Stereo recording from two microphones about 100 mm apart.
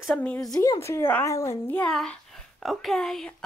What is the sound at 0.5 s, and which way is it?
Speech, 40° left (ahead or behind).